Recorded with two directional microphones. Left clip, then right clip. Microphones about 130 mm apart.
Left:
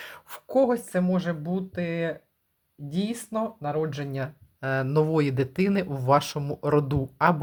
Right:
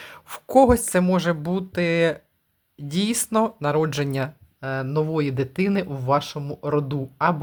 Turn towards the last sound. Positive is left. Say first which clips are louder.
# even
turn(degrees=10)  # may be behind; listen again after turning